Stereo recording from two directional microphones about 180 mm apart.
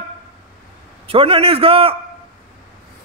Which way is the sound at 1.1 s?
30° right (ahead or behind).